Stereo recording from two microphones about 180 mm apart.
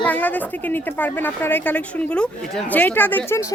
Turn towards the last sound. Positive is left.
turn(degrees=10)  # may be behind; listen again after turning